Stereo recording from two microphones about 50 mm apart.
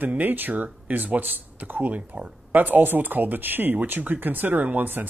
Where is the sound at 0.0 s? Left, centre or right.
Right.